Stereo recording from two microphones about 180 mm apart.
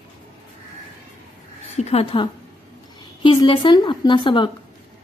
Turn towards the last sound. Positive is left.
turn(degrees=25)  # may be behind; listen again after turning